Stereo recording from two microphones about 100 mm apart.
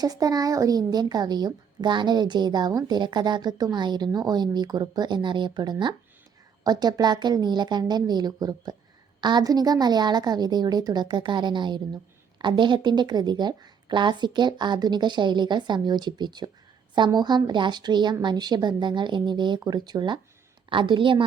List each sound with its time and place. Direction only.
0.0 s a woman's voice: 40° right (ahead or behind)
20.7 s a woman's voice: 55° right (ahead or behind)